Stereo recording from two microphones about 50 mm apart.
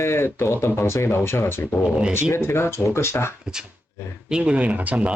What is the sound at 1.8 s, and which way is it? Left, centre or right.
Speech, centre.